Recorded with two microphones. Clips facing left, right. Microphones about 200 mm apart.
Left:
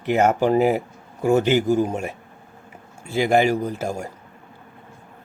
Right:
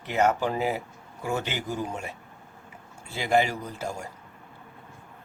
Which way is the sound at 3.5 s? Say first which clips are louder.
Left 10 dB; 45° left (ahead or behind).